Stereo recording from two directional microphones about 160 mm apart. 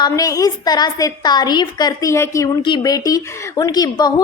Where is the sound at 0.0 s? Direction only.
20° left (ahead or behind).